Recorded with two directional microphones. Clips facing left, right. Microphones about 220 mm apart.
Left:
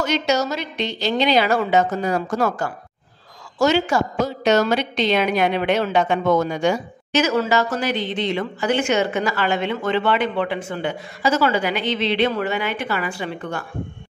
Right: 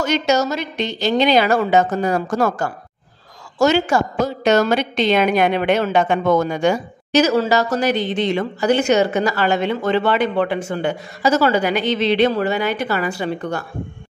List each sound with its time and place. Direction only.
0.0 s a woman's voice: 45° right (ahead or behind)
7.2 s a woman's voice: 35° right (ahead or behind)